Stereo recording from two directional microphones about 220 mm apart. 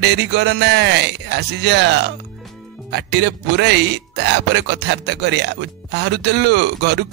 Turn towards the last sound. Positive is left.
turn(degrees=-50)  # may be behind; listen again after turning